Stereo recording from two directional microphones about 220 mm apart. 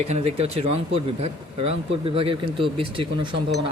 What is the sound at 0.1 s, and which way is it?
Speech, 30° right (ahead or behind).